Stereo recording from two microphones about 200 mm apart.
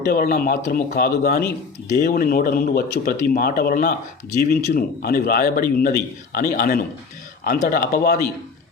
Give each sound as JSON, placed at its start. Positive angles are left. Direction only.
{"t": 0.1, "sound": "speech", "side_deg": 50}